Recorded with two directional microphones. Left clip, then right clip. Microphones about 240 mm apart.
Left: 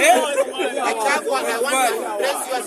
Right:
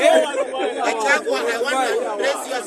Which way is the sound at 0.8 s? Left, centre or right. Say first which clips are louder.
Right 2 dB; centre.